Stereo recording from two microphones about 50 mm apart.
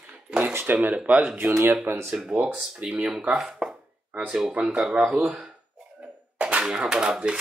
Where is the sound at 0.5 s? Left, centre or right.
Right.